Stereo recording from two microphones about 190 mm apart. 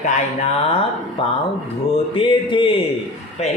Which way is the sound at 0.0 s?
35° left (ahead or behind).